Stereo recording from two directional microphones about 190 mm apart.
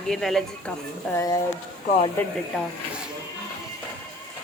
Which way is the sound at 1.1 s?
15° left (ahead or behind).